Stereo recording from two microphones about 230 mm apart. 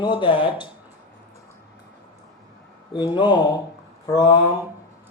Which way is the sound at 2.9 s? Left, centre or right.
Centre.